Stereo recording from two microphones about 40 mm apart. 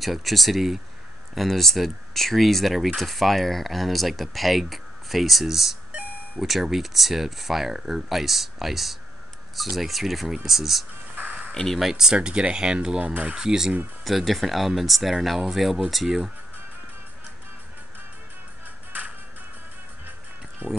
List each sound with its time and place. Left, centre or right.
0.0 s speech: centre
11.5 s speech: centre
11.8 s speech: centre
13.0 s speech: right
13.4 s speech: centre
14.0 s speech: centre
20.6 s speech: right